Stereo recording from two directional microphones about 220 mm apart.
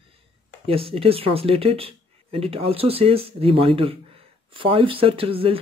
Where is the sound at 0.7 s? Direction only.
25° right (ahead or behind).